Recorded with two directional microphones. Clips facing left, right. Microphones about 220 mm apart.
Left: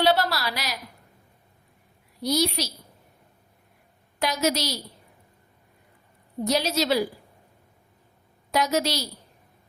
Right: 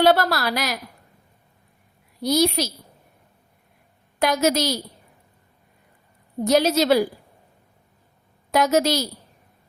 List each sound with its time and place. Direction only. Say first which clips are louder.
0.0 s a sound: right 5 dB; 50° right (ahead or behind)
2.2 s a woman's voice: right 5 dB; 50° right (ahead or behind)
4.2 s a woman's voice: right 5 dB; 50° right (ahead or behind)
6.4 s a woman's voice: right 6 dB; 50° right (ahead or behind)
8.5 s a woman's voice: right 5 dB; 50° right (ahead or behind)